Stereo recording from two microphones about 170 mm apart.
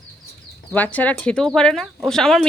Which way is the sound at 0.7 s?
10° left (ahead or behind).